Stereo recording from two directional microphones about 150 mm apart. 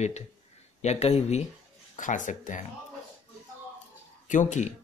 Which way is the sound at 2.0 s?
60° left (ahead or behind).